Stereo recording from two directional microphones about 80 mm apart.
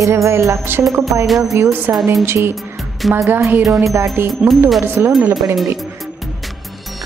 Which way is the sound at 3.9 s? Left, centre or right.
Right.